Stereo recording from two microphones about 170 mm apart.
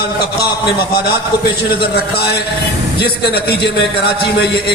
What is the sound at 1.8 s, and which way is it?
A man's voice, 70° left (ahead or behind).